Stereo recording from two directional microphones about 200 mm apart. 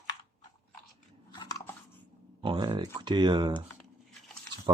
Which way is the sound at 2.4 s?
25° right (ahead or behind).